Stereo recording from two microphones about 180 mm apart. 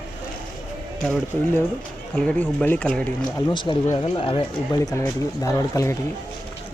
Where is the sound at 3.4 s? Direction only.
25° left (ahead or behind).